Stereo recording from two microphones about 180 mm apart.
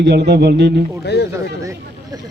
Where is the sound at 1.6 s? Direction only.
15° right (ahead or behind).